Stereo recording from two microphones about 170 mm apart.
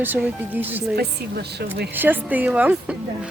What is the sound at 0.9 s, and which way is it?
Speech, 70° right (ahead or behind).